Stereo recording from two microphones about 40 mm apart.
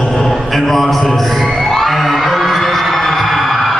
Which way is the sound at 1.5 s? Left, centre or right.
Centre.